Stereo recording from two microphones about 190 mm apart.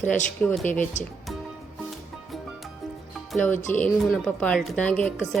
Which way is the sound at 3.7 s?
5° left (ahead or behind).